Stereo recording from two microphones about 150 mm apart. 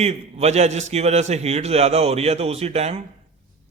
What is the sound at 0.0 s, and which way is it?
A man's voice, 45° right (ahead or behind).